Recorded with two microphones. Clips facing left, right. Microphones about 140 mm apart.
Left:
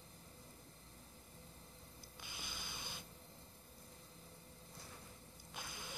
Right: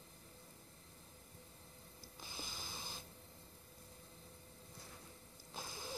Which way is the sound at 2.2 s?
35° right (ahead or behind).